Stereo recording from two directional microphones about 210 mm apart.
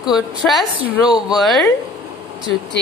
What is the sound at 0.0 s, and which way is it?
A woman's voice, centre (ahead or behind).